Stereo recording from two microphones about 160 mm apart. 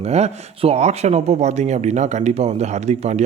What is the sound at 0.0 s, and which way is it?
Speech, 40° right (ahead or behind).